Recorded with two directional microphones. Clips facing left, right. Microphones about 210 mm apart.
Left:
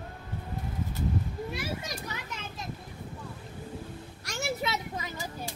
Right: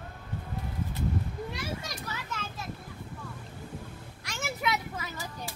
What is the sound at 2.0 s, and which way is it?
Children playing, 15° left (ahead or behind).